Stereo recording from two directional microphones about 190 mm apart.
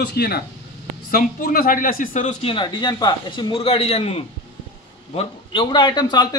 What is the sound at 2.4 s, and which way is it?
A man's voice, 25° left (ahead or behind).